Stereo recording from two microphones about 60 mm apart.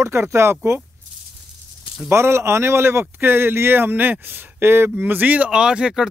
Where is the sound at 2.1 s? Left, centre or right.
Right.